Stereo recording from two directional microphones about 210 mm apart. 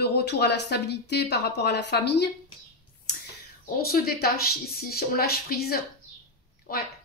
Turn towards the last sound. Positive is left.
turn(degrees=45)  # may be behind; listen again after turning